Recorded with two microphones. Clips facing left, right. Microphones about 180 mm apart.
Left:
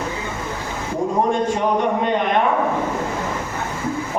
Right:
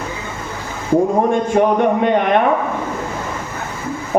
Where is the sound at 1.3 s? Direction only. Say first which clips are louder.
Right 4 dB; 55° right (ahead or behind).